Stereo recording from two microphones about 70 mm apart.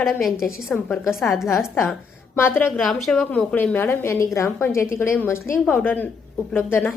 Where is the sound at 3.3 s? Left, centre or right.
Left.